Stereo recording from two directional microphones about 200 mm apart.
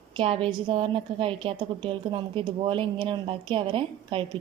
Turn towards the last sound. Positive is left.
turn(degrees=-25)  # may be behind; listen again after turning